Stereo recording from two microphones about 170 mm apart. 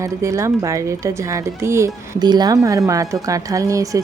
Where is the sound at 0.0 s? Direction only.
20° right (ahead or behind).